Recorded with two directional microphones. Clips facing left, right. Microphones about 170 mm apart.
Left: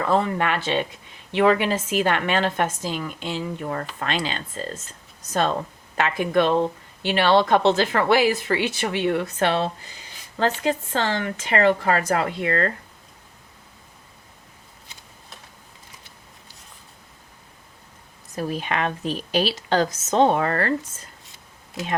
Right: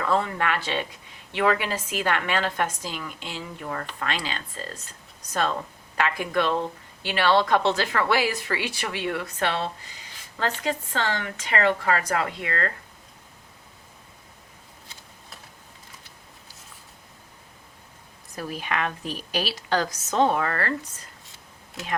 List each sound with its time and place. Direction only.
0.0 s speech: 20° left (ahead or behind)
18.3 s speech: 25° left (ahead or behind)
21.8 s speech: centre (ahead or behind)